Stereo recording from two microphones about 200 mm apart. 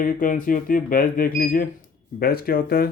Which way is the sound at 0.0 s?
40° left (ahead or behind).